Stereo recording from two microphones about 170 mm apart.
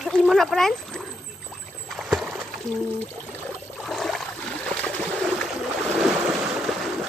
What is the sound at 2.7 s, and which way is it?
Speech, centre (ahead or behind).